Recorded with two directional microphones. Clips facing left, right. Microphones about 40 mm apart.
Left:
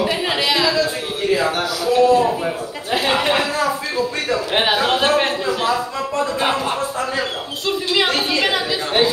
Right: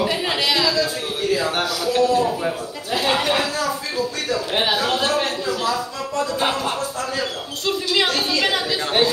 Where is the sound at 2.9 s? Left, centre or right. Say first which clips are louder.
Left 2 dB; left.